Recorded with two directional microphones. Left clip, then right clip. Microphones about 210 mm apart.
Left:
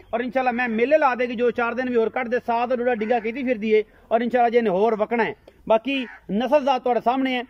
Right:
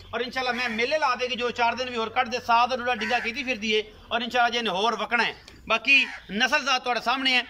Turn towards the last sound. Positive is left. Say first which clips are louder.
# left 2 dB
turn(degrees=35)  # may be behind; listen again after turning